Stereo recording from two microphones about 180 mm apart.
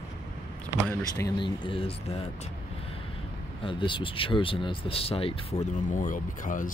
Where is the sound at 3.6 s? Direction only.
30° left (ahead or behind).